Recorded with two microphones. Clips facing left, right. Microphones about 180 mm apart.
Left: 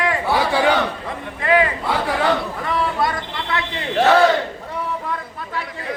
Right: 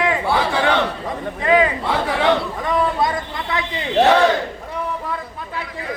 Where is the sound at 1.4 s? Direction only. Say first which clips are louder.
Right 1 dB; 20° right (ahead or behind).